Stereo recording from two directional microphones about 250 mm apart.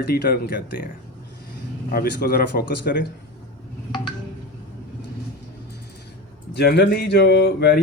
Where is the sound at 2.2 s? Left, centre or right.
Left.